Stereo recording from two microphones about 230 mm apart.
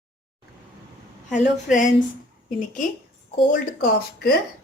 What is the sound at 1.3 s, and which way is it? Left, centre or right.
Speech, left.